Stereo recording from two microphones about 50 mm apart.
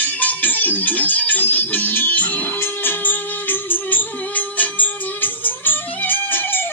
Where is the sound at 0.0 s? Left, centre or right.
Left.